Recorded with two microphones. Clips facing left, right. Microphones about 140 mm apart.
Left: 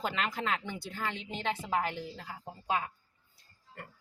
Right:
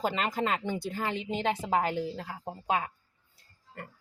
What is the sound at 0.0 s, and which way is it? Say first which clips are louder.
Speech: right 4 dB; 35° right (ahead or behind).